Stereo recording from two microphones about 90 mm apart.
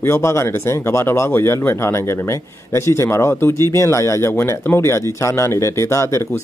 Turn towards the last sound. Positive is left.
turn(degrees=30)  # may be behind; listen again after turning